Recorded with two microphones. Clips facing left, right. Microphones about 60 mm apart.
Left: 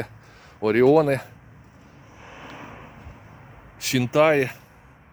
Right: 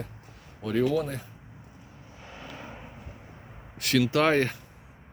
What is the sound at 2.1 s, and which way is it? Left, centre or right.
Vehicle, centre.